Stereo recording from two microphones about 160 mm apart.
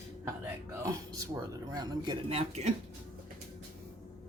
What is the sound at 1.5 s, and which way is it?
Speech, 20° right (ahead or behind).